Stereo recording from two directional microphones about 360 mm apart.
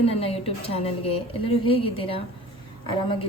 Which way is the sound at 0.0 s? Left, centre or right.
Centre.